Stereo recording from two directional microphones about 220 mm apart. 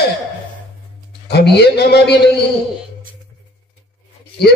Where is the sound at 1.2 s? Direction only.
45° left (ahead or behind).